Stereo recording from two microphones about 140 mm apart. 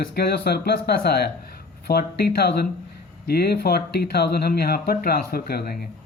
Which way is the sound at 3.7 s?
90° left.